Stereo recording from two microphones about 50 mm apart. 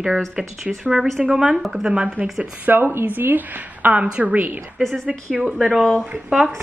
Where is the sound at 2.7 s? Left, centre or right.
Right.